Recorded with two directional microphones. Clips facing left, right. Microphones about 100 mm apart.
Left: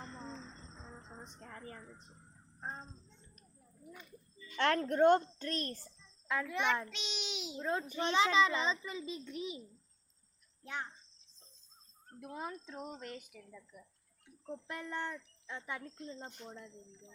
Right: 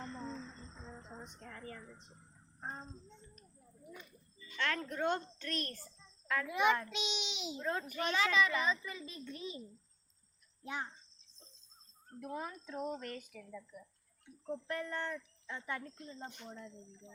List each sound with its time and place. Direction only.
1.4 s a sound: 25° left (ahead or behind)
2.6 s jingle bell: 5° right (ahead or behind)
4.5 s speech: 55° left (ahead or behind)
5.4 s a child's voice: 30° left (ahead or behind)
6.2 s a child's voice: 15° left (ahead or behind)
6.5 s a child's voice: 5° right (ahead or behind)
7.6 s speech: 15° left (ahead or behind)
7.9 s a child's voice: 25° left (ahead or behind)
10.6 s speech: 10° right (ahead or behind)
12.2 s speech: 15° left (ahead or behind)
15.8 s a child's voice: centre (ahead or behind)